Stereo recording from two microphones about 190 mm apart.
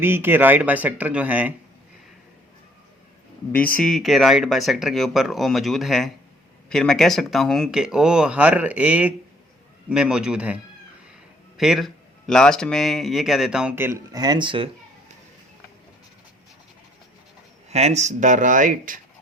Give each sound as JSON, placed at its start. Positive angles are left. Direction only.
{"t": 0.0, "sound": "speech", "side_deg": -10}
{"t": 3.5, "sound": "speech", "side_deg": 10}
{"t": 17.7, "sound": "speech", "side_deg": -35}